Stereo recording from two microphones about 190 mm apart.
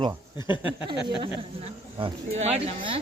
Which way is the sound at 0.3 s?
25° left (ahead or behind).